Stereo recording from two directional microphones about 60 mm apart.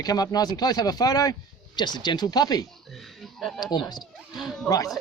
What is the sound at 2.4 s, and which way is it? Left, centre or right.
Speech, left.